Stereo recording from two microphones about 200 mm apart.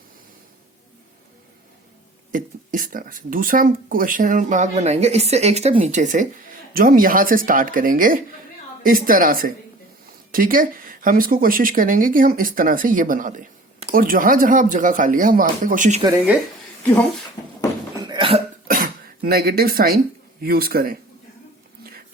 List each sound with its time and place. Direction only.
2.3 s speech: 45° right (ahead or behind)
16.1 s speech: 5° right (ahead or behind)
18.0 s hiccup: 25° right (ahead or behind)
18.7 s cough: 45° right (ahead or behind)
20.4 s speech: 50° right (ahead or behind)